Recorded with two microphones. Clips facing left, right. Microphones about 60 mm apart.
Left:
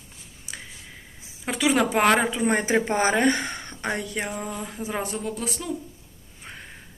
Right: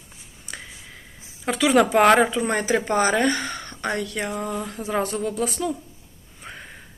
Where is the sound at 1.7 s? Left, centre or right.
Centre.